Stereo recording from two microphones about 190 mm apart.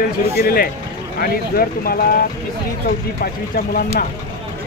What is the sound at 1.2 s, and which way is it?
Speech, 50° left (ahead or behind).